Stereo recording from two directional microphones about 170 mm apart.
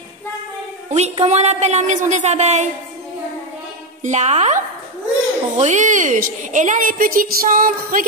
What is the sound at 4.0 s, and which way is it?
A woman's voice, 45° right (ahead or behind).